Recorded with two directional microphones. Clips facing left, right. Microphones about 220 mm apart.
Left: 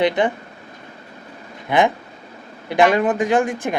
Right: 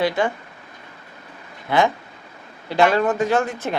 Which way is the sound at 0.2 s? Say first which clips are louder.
Left 2 dB; 20° left (ahead or behind).